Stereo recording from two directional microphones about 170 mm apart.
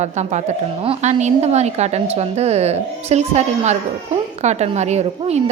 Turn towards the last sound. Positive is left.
turn(degrees=-40)  # may be behind; listen again after turning